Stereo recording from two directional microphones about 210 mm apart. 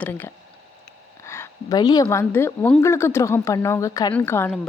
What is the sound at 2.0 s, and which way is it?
A woman's voice, 10° left (ahead or behind).